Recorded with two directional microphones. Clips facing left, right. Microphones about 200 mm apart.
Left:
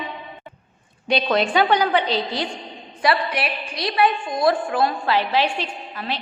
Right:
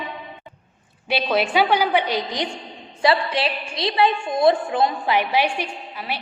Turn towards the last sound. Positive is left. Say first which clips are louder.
# left 1 dB
turn(degrees=-10)  # may be behind; listen again after turning